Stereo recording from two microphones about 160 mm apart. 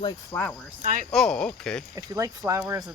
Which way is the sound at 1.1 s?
5° left (ahead or behind).